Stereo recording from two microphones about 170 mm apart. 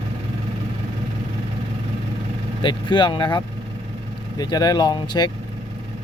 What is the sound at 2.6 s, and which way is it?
Speech, 25° left (ahead or behind).